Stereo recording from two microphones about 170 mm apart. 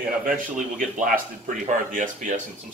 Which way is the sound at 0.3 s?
50° right (ahead or behind).